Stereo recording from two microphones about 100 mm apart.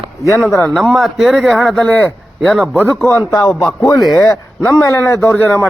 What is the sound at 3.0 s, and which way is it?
Speech, 25° left (ahead or behind).